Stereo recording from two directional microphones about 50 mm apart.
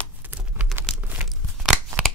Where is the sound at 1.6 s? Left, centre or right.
Centre.